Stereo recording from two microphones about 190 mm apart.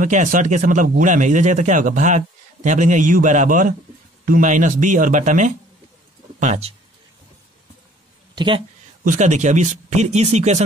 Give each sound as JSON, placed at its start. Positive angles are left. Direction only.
{"t": 0.0, "sound": "a man's voice", "side_deg": -45}
{"t": 8.4, "sound": "speech", "side_deg": -25}
{"t": 9.0, "sound": "a man's voice", "side_deg": -40}